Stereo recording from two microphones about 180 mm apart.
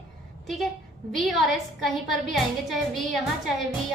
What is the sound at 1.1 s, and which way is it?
A woman's voice, centre (ahead or behind).